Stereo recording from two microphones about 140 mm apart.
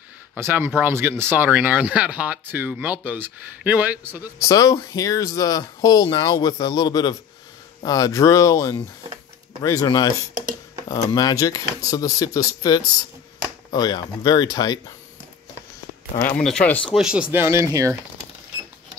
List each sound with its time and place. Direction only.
0.4 s speech: 15° right (ahead or behind)
4.4 s speech: 25° left (ahead or behind)
16.2 s speech: 15° left (ahead or behind)
16.9 s speech: 5° right (ahead or behind); by 17.9 s 20° right (ahead or behind)